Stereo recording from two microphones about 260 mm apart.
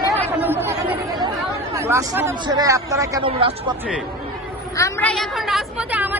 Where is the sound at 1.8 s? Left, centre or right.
Centre.